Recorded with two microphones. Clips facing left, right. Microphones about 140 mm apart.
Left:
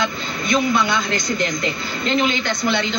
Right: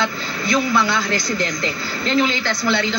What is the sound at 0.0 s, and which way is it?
A woman's voice, 20° left (ahead or behind).